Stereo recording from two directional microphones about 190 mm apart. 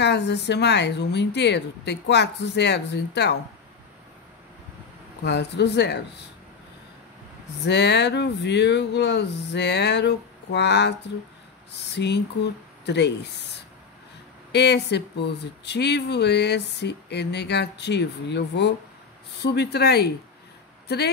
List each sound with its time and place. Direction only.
0.0 s speech: 65° left (ahead or behind)
5.2 s speech: 60° left (ahead or behind)
7.6 s speech: 65° left (ahead or behind)
14.5 s speech: 60° left (ahead or behind)